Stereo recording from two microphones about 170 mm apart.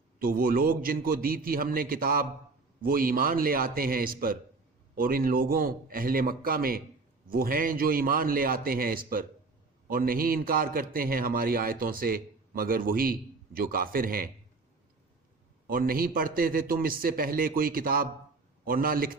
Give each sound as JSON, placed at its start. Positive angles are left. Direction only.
{"t": 0.2, "sound": "a man's voice", "side_deg": -60}
{"t": 15.6, "sound": "a man's voice", "side_deg": -60}